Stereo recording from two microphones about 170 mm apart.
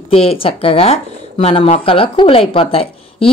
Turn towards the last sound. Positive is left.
turn(degrees=35)  # may be behind; listen again after turning